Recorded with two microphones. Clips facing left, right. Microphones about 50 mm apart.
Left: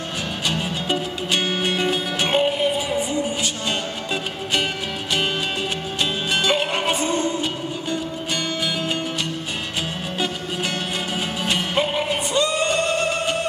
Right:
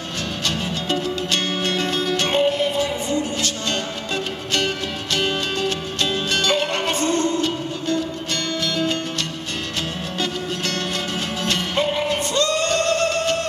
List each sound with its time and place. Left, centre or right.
0.5 s music: centre
5.1 s music: centre
10.1 s music: centre